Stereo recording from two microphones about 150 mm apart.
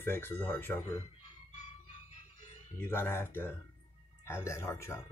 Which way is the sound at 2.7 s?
15° left (ahead or behind).